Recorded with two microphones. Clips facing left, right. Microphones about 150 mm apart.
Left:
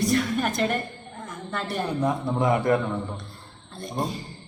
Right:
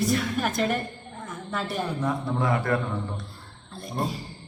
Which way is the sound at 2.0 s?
20° left (ahead or behind).